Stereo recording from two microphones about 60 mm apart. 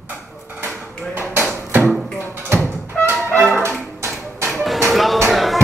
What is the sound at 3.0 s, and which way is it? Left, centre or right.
Music, left.